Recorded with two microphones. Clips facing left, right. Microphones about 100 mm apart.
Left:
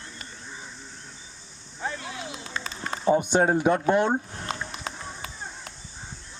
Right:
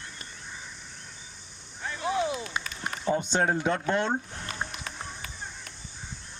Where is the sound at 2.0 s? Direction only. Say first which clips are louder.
Right 9 dB; 25° right (ahead or behind).